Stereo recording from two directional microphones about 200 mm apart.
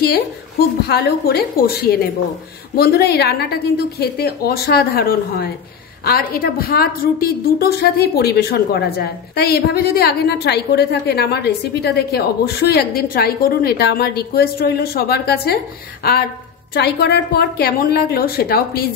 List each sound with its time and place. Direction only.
0.0 s a woman's voice: 50° left (ahead or behind)